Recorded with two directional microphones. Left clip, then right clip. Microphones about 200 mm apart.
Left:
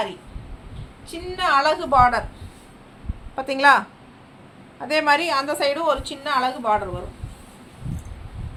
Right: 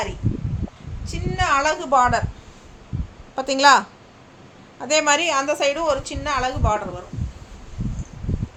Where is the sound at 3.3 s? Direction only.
40° right (ahead or behind); by 6.7 s 20° right (ahead or behind).